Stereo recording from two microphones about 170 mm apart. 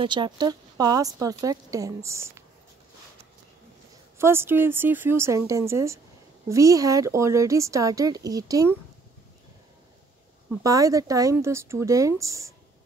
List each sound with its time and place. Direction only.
0.0 s speech: 25° right (ahead or behind)
4.2 s a woman's voice: 15° right (ahead or behind)
10.6 s speech: 20° right (ahead or behind)